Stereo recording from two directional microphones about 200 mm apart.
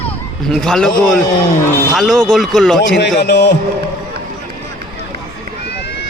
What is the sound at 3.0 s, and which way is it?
Speech, 55° left (ahead or behind).